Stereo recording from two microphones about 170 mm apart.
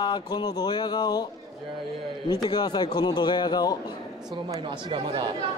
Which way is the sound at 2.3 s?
25° left (ahead or behind).